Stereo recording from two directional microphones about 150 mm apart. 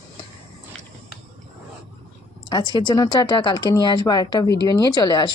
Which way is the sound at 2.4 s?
30° left (ahead or behind).